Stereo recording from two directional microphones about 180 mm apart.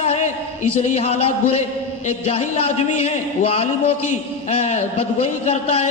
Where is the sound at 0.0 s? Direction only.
35° left (ahead or behind).